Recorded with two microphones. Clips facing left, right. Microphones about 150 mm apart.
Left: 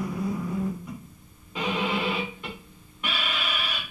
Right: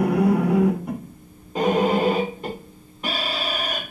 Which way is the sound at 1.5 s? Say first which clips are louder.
Right 9 dB; 45° right (ahead or behind).